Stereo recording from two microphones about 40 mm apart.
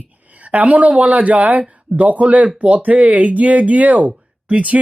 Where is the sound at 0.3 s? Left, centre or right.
Right.